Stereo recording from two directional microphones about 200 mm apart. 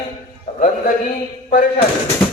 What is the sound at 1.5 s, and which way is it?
Speech, 40° left (ahead or behind).